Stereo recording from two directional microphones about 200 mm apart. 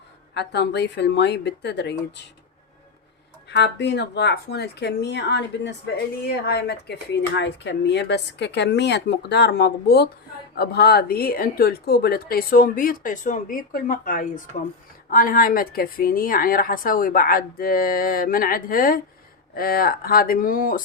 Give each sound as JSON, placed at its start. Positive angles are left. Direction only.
{"t": 0.3, "sound": "speech", "side_deg": 55}
{"t": 3.5, "sound": "a woman's voice", "side_deg": 60}